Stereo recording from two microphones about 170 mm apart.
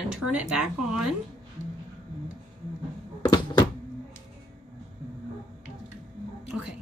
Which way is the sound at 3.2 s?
25° left (ahead or behind).